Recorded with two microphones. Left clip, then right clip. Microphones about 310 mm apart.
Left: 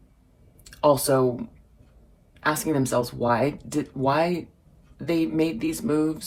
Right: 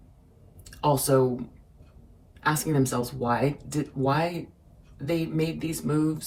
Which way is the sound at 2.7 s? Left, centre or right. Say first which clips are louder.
Left 3 dB; left.